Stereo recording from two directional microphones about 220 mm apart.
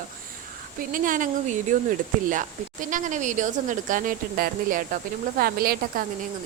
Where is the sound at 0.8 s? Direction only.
40° right (ahead or behind).